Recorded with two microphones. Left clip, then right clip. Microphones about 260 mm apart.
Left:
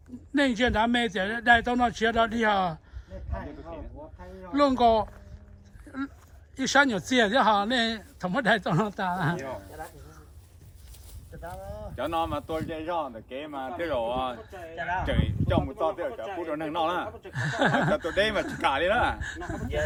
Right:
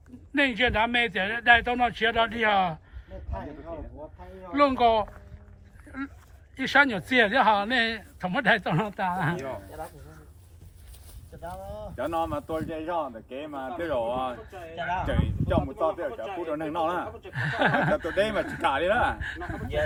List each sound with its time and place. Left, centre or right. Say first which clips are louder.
0.3 s speech: right 1 dB; centre
4.5 s speech: even; centre
6.6 s speech: right 1 dB; centre
8.9 s speech: right 1 dB; left
11.4 s a sound: right 2 dB; left
11.9 s speech: even; centre
14.5 s speech: even; left
15.0 s speech: even; centre
17.1 s speech: even; left
17.3 s speech: right 1 dB; centre